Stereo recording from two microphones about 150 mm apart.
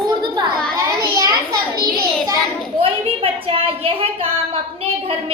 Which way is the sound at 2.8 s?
40° right (ahead or behind).